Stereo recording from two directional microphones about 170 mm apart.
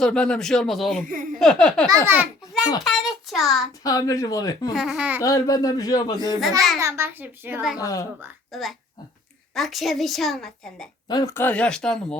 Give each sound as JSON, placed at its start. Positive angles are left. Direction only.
{"t": 0.0, "sound": "a woman's voice", "side_deg": 5}
{"t": 1.0, "sound": "speech", "side_deg": -55}
{"t": 1.4, "sound": "a woman's voice", "side_deg": 5}
{"t": 1.9, "sound": "a child's voice", "side_deg": -15}
{"t": 2.8, "sound": "a woman's voice", "side_deg": 0}
{"t": 3.7, "sound": "speech", "side_deg": 20}
{"t": 4.7, "sound": "a woman's voice", "side_deg": 0}
{"t": 5.2, "sound": "speech", "side_deg": 20}
{"t": 6.7, "sound": "a child's voice", "side_deg": -15}
{"t": 7.8, "sound": "speech", "side_deg": 20}
{"t": 8.5, "sound": "a woman's voice", "side_deg": 0}
{"t": 11.1, "sound": "speech", "side_deg": 20}